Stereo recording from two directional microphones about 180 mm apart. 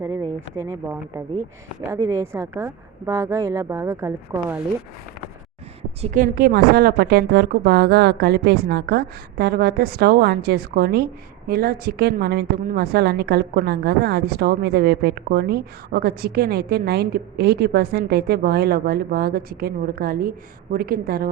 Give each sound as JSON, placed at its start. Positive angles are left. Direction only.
{"t": 0.0, "sound": "a woman's voice", "side_deg": -15}
{"t": 6.0, "sound": "a woman's voice", "side_deg": -45}